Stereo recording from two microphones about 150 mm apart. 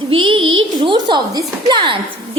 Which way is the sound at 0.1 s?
35° right (ahead or behind).